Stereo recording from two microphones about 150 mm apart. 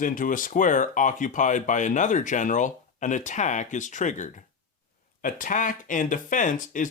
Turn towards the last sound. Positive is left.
turn(degrees=60)  # may be behind; listen again after turning